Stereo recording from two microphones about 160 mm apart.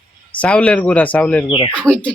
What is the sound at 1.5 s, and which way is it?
Speech, 30° left (ahead or behind).